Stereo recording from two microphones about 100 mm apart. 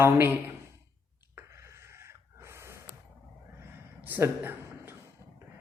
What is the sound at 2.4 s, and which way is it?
Gasp, 25° right (ahead or behind).